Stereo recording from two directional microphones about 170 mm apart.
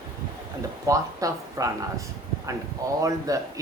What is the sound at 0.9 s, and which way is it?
Speech, 20° right (ahead or behind).